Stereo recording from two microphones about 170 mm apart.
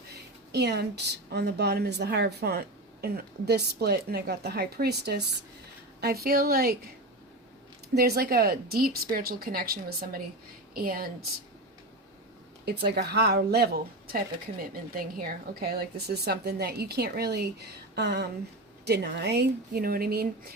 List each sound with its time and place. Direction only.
0.5 s a woman's voice: 80° right; by 6.7 s 65° right (ahead or behind)
7.9 s speech: 65° right (ahead or behind)
12.6 s a woman's voice: 70° right (ahead or behind)
14.6 s a woman's voice: 60° right (ahead or behind)